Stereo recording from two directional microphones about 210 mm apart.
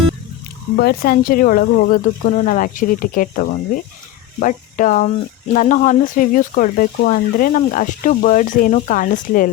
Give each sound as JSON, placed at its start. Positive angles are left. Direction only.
{"t": 0.8, "sound": "speech", "side_deg": 45}